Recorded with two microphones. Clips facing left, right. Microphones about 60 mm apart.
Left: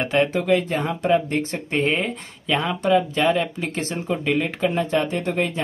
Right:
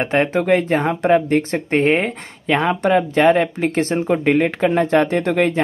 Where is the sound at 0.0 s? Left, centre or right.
Right.